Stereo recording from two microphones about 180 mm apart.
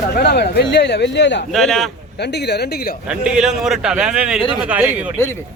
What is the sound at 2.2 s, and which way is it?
Speech, 70° left (ahead or behind).